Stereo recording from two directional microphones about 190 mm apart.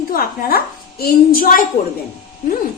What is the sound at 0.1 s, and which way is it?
A woman's voice, 50° left (ahead or behind).